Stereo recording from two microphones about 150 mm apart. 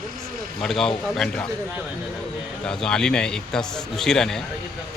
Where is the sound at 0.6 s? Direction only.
5° left (ahead or behind).